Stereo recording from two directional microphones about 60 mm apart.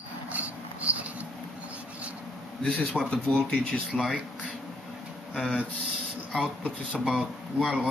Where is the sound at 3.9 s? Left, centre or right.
Centre.